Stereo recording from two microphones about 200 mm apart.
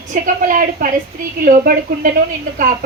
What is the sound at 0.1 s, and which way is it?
Speech, 45° right (ahead or behind).